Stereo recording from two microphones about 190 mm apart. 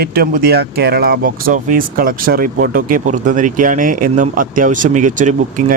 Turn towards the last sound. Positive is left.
turn(degrees=-40)  # may be behind; listen again after turning